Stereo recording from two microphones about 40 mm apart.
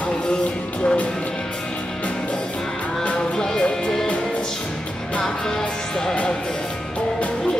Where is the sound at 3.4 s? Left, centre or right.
Left.